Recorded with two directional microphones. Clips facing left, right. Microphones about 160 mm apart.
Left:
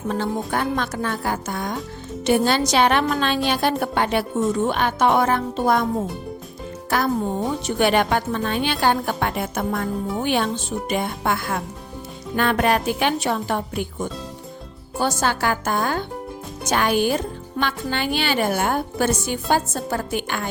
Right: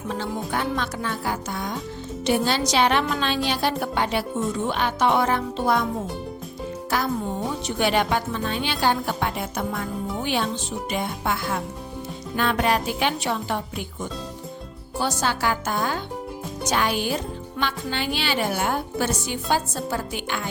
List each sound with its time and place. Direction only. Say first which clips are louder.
0.1 s speech: left 4 dB; 50° left (ahead or behind)
7.8 s speech: left 3 dB; 55° left (ahead or behind)